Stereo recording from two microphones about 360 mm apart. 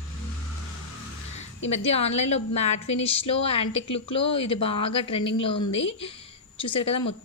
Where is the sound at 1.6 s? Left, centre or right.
Centre.